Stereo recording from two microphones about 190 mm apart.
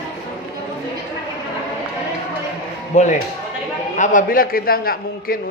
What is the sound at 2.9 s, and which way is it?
A man's voice, 40° left (ahead or behind).